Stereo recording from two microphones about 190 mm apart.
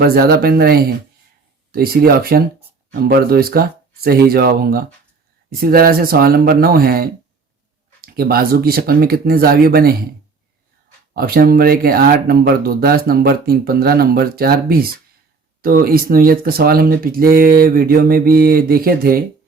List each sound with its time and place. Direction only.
0.0 s speech: 55° right (ahead or behind)
11.1 s speech: 50° right (ahead or behind)